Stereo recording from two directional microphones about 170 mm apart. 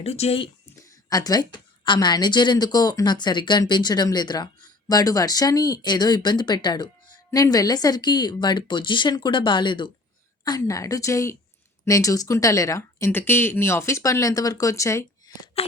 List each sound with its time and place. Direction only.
0.0 s speech: 40° left (ahead or behind)
0.8 s a woman's voice: 20° left (ahead or behind)